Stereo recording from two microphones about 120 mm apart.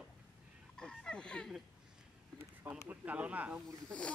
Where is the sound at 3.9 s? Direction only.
10° left (ahead or behind).